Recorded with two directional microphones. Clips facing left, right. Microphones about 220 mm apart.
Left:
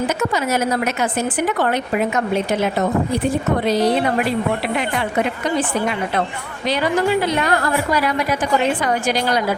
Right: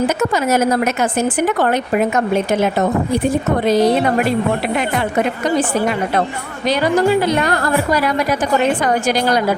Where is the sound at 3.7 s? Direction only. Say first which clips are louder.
Right 4 dB; 45° right (ahead or behind).